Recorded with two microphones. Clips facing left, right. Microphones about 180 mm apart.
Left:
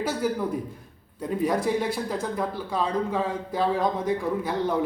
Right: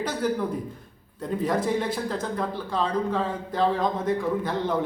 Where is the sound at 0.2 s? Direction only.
10° left (ahead or behind).